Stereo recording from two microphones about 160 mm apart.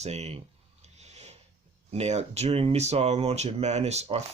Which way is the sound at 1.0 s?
45° right (ahead or behind).